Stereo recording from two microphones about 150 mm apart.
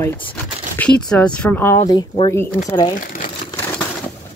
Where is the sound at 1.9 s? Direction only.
35° left (ahead or behind).